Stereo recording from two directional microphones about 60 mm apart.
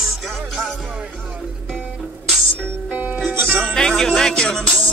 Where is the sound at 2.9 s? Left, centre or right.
Right.